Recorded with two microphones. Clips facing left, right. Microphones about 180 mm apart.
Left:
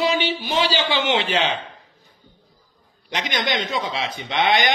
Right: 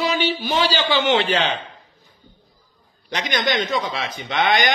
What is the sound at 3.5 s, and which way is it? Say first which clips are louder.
Speech: right 3 dB; 25° left (ahead or behind).